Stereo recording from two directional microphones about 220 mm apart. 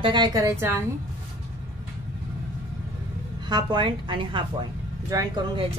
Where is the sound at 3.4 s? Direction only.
20° right (ahead or behind).